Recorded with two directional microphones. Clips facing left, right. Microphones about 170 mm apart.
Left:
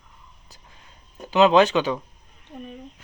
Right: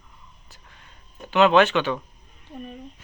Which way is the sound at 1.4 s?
20° left (ahead or behind).